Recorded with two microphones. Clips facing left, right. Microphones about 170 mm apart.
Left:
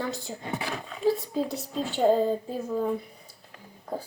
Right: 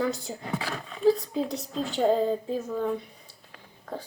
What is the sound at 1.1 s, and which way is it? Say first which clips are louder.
A woman's voice: right 2 dB; 5° left (ahead or behind).